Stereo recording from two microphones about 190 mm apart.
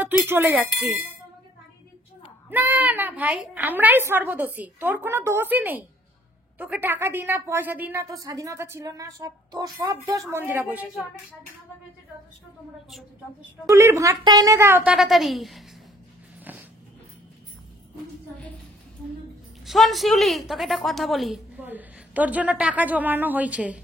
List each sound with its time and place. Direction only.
0.0 s a woman's voice: 10° right (ahead or behind)
2.5 s a woman's voice: 10° right (ahead or behind)
13.7 s a woman's voice: 15° right (ahead or behind)
19.6 s a woman's voice: centre (ahead or behind)